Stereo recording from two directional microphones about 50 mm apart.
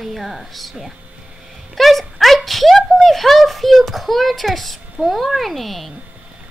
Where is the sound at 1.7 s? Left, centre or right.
Centre.